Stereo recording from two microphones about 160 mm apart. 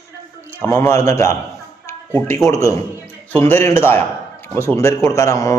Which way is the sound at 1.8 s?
15° left (ahead or behind).